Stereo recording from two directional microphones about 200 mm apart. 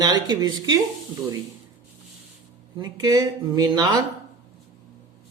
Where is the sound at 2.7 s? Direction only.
20° right (ahead or behind).